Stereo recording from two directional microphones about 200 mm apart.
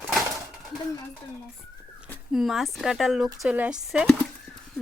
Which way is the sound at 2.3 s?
Centre (ahead or behind).